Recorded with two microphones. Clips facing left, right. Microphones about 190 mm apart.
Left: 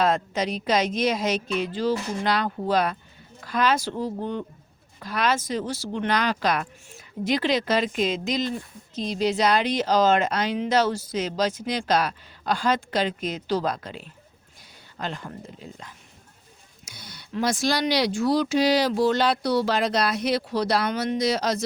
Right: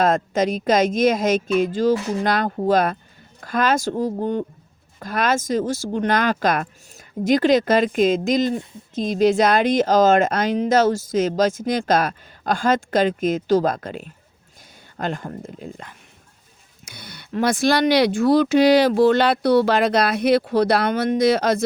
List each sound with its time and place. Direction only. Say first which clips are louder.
0.0 s speech: right 5 dB; 45° right (ahead or behind)